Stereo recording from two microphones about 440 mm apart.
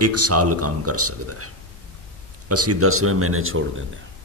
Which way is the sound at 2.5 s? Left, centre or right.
Right.